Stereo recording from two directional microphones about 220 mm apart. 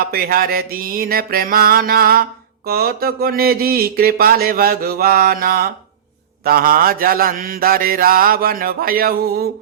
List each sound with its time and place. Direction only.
0.0 s speech: 45° right (ahead or behind)
6.4 s mantra: 40° right (ahead or behind)